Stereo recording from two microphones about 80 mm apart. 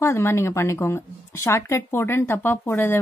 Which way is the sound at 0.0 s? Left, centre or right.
Left.